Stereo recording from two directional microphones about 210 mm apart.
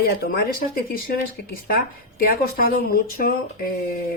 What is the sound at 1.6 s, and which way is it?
Speech, 45° left (ahead or behind).